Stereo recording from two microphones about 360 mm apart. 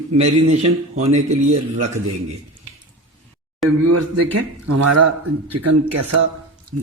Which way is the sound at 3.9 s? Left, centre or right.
Right.